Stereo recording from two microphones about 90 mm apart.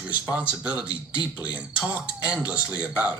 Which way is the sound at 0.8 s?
55° left (ahead or behind).